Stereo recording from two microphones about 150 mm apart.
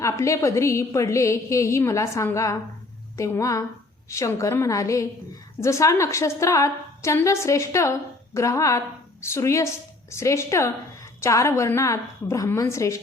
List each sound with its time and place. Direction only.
0.0 s a woman's voice: 20° left (ahead or behind)